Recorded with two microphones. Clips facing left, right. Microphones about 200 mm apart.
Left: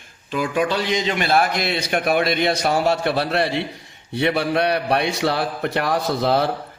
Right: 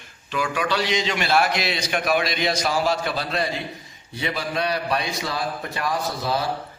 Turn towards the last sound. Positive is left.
turn(degrees=65)  # may be behind; listen again after turning